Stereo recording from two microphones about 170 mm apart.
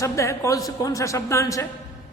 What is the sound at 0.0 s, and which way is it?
A man's voice, 15° left (ahead or behind).